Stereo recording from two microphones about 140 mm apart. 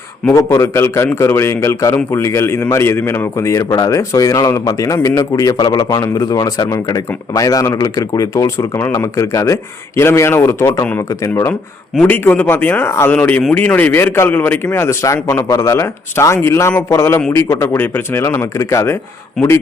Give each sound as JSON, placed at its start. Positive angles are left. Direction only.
{"t": 0.3, "sound": "a man's voice", "side_deg": 20}